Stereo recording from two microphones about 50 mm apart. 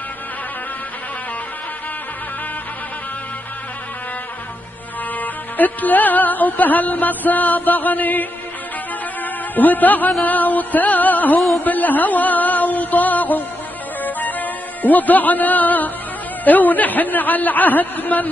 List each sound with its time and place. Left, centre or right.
5.2 s music: left